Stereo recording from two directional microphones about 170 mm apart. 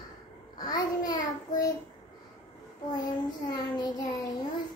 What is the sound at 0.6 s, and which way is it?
Child singing, 20° left (ahead or behind).